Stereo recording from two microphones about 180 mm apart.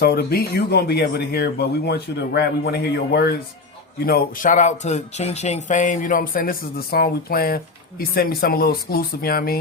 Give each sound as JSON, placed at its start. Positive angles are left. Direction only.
{"t": 0.0, "sound": "speech", "side_deg": 60}
{"t": 4.0, "sound": "speech", "side_deg": 55}